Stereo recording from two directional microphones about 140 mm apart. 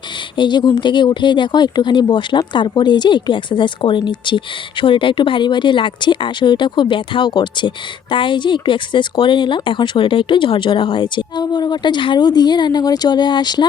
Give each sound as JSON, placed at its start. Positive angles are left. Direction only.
{"t": 0.3, "sound": "speech", "side_deg": 35}